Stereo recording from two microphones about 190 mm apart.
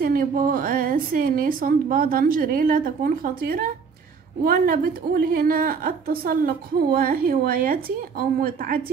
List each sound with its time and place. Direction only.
0.0 s a woman's voice: 50° right (ahead or behind)